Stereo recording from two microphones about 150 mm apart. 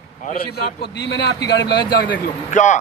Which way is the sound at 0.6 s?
90° left.